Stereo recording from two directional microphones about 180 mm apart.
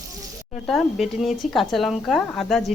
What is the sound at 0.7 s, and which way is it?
Speech, centre (ahead or behind).